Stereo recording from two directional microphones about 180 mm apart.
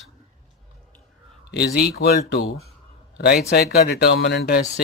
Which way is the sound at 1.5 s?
65° left (ahead or behind).